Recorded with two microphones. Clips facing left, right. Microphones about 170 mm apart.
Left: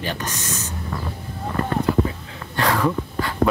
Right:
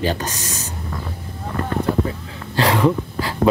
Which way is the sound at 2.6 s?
25° right (ahead or behind).